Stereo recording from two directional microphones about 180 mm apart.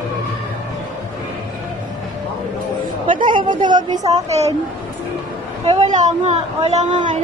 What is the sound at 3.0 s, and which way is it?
A woman's voice, 25° right (ahead or behind).